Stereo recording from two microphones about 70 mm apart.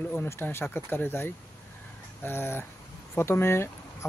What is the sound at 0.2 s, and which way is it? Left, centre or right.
Speech, left.